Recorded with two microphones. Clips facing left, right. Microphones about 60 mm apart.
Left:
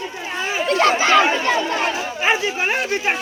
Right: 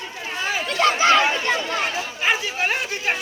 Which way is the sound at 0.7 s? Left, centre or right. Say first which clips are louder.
Left 4 dB; left.